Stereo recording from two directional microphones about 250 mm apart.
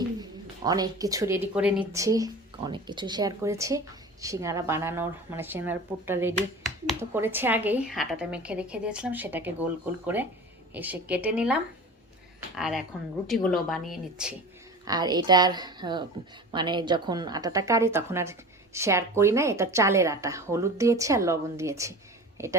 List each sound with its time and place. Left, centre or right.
0.2 s a woman's voice: centre
10.8 s a woman's voice: centre
14.8 s speech: centre